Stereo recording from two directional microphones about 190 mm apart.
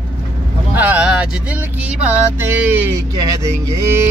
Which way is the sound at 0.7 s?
10° right (ahead or behind).